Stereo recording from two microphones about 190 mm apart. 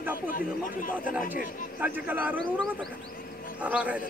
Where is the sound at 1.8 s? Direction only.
10° right (ahead or behind).